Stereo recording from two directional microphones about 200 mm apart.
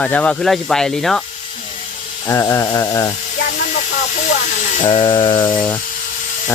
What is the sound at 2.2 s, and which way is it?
Speech, 15° left (ahead or behind).